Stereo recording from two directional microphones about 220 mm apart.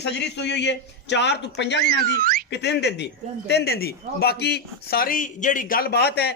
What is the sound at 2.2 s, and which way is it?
Speech, 40° right (ahead or behind).